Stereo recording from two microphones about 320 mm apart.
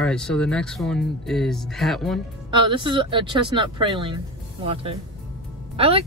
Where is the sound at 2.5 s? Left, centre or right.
Centre.